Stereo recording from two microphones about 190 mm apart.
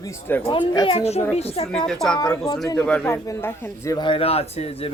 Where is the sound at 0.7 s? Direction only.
30° left (ahead or behind).